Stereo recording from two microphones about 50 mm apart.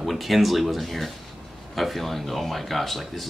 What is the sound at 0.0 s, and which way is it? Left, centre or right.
Speech, centre.